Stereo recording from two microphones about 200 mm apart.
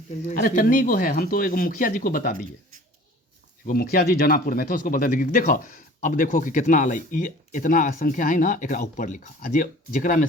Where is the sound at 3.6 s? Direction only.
45° left (ahead or behind).